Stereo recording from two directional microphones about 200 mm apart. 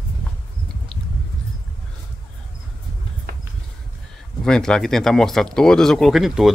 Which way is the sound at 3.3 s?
50° right (ahead or behind).